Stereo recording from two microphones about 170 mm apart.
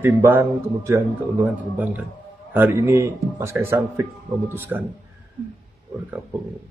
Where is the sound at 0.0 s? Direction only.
10° right (ahead or behind).